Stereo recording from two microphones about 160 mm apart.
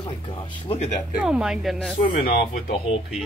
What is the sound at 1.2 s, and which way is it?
Speech, 5° right (ahead or behind).